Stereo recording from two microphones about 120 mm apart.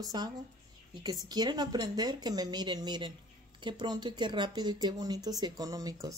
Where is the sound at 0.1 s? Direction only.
35° right (ahead or behind).